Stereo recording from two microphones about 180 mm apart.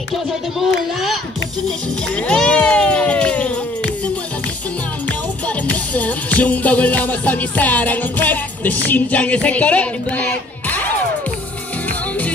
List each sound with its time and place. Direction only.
0.1 s speech: centre (ahead or behind)
2.1 s a sound: 5° left (ahead or behind)
5.7 s music: 10° left (ahead or behind)